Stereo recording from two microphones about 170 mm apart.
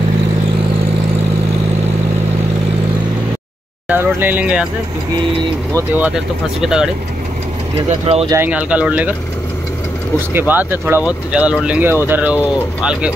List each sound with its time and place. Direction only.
3.9 s speech: 10° right (ahead or behind)
5.7 s speech: 20° right (ahead or behind)
6.6 s speech: 5° right (ahead or behind)
8.3 s speech: 10° right (ahead or behind)
10.3 s speech: 10° right (ahead or behind)